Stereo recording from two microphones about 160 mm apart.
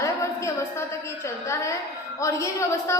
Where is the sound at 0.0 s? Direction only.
20° left (ahead or behind).